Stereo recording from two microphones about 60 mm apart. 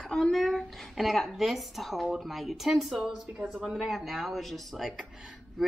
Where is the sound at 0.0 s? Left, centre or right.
Centre.